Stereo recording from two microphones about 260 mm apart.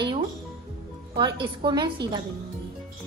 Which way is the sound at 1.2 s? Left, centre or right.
Centre.